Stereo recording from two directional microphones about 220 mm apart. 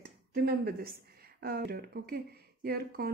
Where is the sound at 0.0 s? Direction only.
45° right (ahead or behind).